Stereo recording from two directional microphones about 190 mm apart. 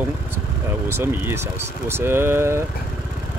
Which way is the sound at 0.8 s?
10° right (ahead or behind).